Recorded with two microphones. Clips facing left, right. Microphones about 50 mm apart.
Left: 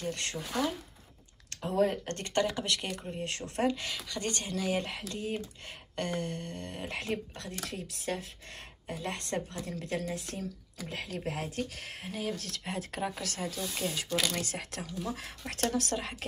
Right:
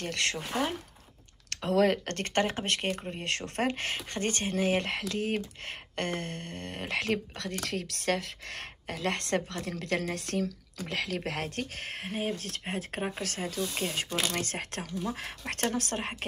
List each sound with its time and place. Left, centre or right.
0.0 s speech: right
0.5 s speech: right
1.5 s speech: right
2.0 s speech: right